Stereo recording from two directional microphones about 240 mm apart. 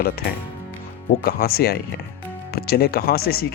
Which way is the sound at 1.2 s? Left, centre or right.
Left.